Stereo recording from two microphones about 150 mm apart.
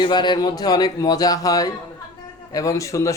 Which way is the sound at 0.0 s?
30° left (ahead or behind).